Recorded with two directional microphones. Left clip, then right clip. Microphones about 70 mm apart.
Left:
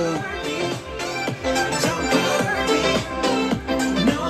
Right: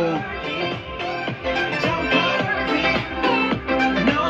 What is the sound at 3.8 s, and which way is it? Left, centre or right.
Music, left.